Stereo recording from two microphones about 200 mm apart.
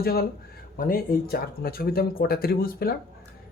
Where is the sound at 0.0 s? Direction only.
50° left (ahead or behind).